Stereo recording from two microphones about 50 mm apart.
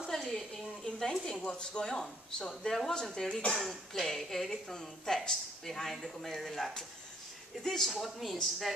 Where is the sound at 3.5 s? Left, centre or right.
Centre.